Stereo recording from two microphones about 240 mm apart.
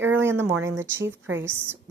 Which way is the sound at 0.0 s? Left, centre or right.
Centre.